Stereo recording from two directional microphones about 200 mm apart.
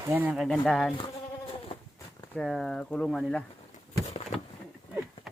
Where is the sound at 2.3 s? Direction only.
Centre (ahead or behind).